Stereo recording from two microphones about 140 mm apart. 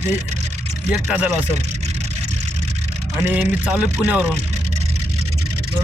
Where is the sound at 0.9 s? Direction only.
5° right (ahead or behind).